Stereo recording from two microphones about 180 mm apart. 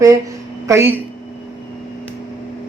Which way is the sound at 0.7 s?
15° right (ahead or behind).